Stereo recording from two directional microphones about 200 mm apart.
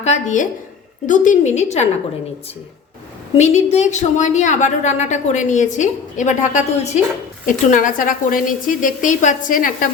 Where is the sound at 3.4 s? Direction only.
35° left (ahead or behind).